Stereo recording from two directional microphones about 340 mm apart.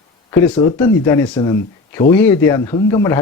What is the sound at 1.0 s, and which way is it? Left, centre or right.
Speech, centre.